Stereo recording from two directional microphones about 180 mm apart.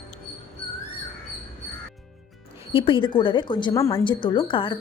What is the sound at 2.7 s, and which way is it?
A woman's voice, 30° left (ahead or behind).